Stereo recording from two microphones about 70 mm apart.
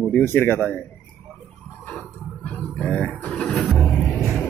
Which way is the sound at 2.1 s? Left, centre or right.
Left.